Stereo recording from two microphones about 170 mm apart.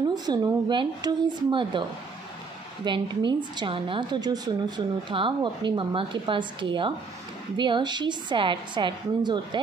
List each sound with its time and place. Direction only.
0.1 s a woman's voice: 25° right (ahead or behind)